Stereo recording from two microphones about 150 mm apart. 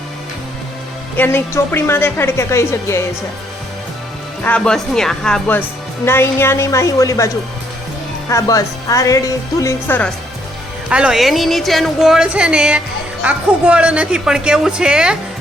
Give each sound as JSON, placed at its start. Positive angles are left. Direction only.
{"t": 1.1, "sound": "a woman's voice", "side_deg": 15}
{"t": 4.4, "sound": "a woman's voice", "side_deg": 5}
{"t": 8.3, "sound": "speech", "side_deg": 20}
{"t": 10.8, "sound": "a woman's voice", "side_deg": -5}